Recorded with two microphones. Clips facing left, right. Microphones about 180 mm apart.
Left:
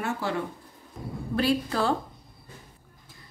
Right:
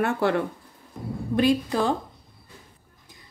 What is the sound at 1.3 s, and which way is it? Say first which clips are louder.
Speech: right 4 dB; 15° right (ahead or behind).